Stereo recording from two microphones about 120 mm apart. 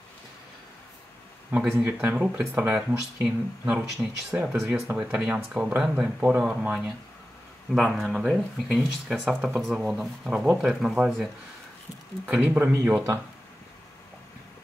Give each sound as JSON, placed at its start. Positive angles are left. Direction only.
{"t": 1.8, "sound": "speech", "side_deg": -15}
{"t": 12.3, "sound": "speech", "side_deg": -15}